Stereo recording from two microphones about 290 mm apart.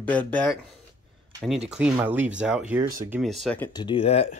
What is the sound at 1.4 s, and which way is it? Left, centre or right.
Speech, centre.